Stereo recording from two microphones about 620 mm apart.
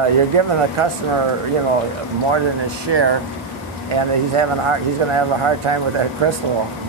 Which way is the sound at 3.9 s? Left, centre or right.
Right.